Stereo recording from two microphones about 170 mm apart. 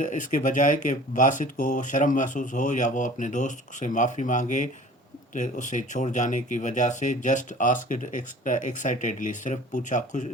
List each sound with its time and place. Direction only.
0.0 s speech: 50° left (ahead or behind)